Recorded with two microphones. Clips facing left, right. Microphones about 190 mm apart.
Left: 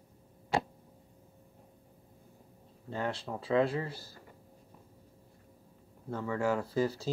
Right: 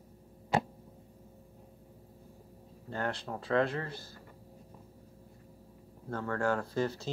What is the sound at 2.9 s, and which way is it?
Speech, 5° left (ahead or behind).